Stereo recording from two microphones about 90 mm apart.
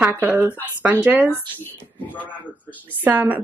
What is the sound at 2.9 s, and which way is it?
Speech, 20° right (ahead or behind).